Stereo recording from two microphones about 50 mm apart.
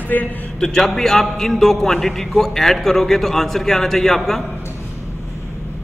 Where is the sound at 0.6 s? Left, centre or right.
Centre.